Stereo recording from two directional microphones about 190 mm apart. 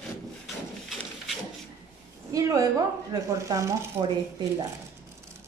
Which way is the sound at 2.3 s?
20° right (ahead or behind).